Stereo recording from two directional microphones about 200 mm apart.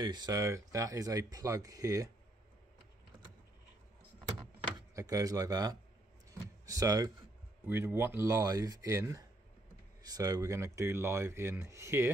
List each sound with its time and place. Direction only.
0.0 s speech: 20° right (ahead or behind)
4.7 s speech: 20° right (ahead or behind)